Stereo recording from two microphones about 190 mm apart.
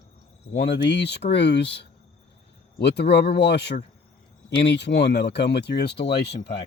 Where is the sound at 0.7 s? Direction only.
65° left (ahead or behind).